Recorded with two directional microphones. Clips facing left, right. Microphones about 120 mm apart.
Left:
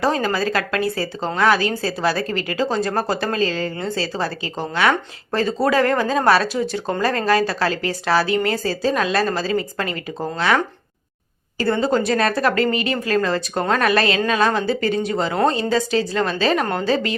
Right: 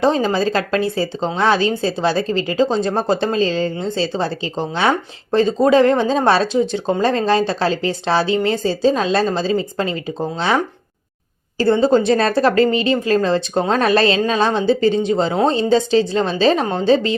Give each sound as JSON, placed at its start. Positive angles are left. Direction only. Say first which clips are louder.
{"t": 0.0, "sound": "a woman's voice", "louder": "right 4 dB", "side_deg": -25}
{"t": 11.6, "sound": "a woman's voice", "louder": "right 5 dB", "side_deg": -25}